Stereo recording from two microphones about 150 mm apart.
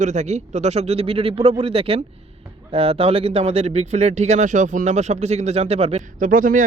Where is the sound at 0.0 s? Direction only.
50° right (ahead or behind).